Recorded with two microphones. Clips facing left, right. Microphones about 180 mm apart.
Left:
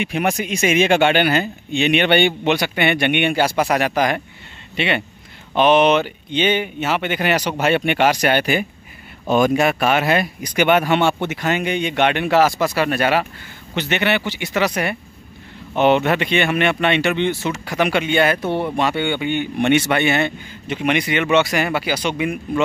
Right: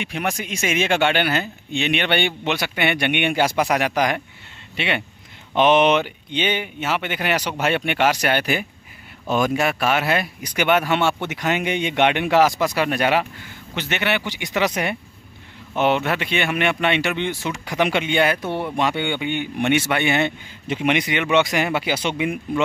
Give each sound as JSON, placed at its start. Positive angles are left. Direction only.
{"t": 0.0, "sound": "speech", "side_deg": 10}
{"t": 2.1, "sound": "speech", "side_deg": 55}
{"t": 2.6, "sound": "speech", "side_deg": -5}
{"t": 5.6, "sound": "speech", "side_deg": -20}
{"t": 7.4, "sound": "speech", "side_deg": 10}
{"t": 11.4, "sound": "speech", "side_deg": -15}
{"t": 15.8, "sound": "speech", "side_deg": -5}
{"t": 18.4, "sound": "speech", "side_deg": 15}
{"t": 18.8, "sound": "speech", "side_deg": -15}